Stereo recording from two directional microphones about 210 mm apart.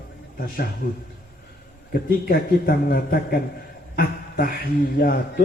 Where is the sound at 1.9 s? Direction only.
45° left (ahead or behind).